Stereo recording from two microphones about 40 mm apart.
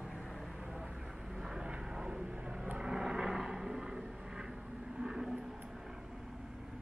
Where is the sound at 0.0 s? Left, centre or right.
Centre.